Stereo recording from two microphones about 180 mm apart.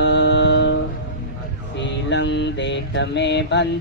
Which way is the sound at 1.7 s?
80° left.